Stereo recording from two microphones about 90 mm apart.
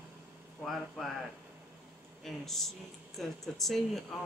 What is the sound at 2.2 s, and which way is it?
Speech, 5° left (ahead or behind).